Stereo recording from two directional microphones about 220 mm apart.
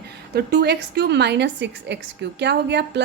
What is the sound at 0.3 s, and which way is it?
A woman's voice, 45° right (ahead or behind).